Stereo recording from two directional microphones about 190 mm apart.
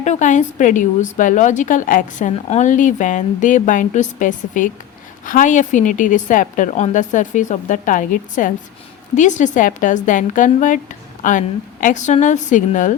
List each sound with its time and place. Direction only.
0.0 s a woman's voice: 40° left (ahead or behind)